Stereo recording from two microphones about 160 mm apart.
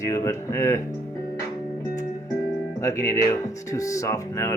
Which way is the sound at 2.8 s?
20° left (ahead or behind).